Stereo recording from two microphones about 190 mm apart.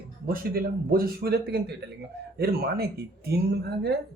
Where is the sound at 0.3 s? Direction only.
50° right (ahead or behind).